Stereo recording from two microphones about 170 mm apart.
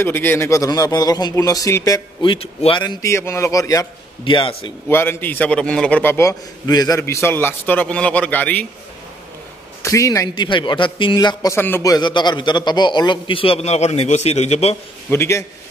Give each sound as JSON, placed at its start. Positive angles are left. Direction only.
{"t": 0.0, "sound": "a man's voice", "side_deg": 10}
{"t": 2.2, "sound": "a man's voice", "side_deg": 35}
{"t": 4.8, "sound": "a man's voice", "side_deg": 10}
{"t": 9.8, "sound": "a man's voice", "side_deg": 20}
{"t": 11.9, "sound": "a man's voice", "side_deg": 25}
{"t": 15.0, "sound": "a man's voice", "side_deg": 15}